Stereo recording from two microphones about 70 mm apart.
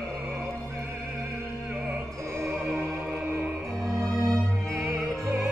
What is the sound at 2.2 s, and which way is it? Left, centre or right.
Music, right.